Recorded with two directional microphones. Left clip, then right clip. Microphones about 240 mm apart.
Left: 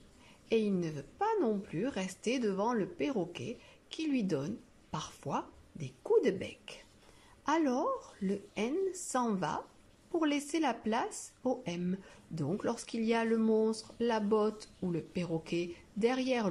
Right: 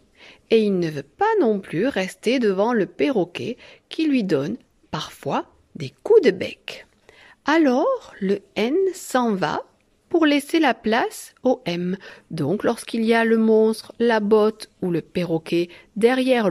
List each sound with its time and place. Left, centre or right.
0.2 s speech: right